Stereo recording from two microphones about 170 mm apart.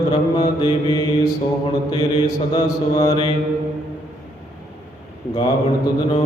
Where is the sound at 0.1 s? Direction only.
30° left (ahead or behind).